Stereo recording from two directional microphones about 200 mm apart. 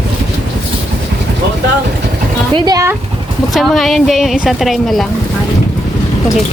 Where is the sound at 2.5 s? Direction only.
20° right (ahead or behind).